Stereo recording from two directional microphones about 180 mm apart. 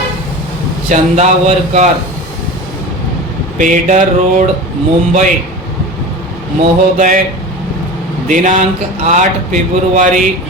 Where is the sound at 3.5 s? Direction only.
45° right (ahead or behind).